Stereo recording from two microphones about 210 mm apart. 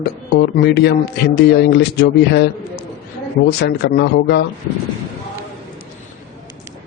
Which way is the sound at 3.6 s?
55° left (ahead or behind).